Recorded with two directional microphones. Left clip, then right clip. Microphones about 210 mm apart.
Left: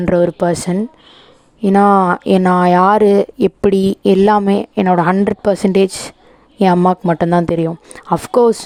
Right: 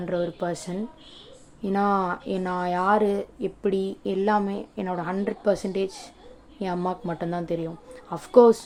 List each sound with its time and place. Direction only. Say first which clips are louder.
0.0 s speech: left 14 dB; 45° left (ahead or behind)